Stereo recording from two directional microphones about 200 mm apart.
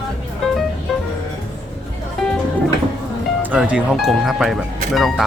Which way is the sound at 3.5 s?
5° right (ahead or behind).